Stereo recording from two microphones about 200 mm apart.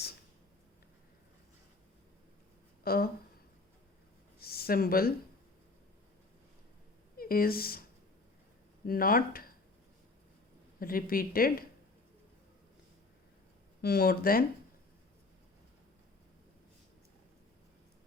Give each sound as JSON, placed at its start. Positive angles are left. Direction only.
{"t": 2.8, "sound": "speech", "side_deg": 50}
{"t": 4.4, "sound": "a sound", "side_deg": 50}
{"t": 7.2, "sound": "a woman's voice", "side_deg": 45}
{"t": 10.8, "sound": "a woman's voice", "side_deg": 45}
{"t": 13.8, "sound": "a woman's voice", "side_deg": 50}